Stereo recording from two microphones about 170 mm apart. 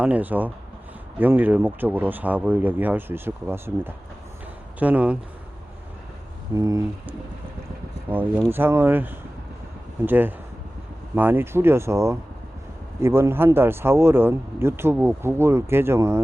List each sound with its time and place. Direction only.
0.0 s speech: 10° right (ahead or behind)
6.5 s speech: 20° right (ahead or behind)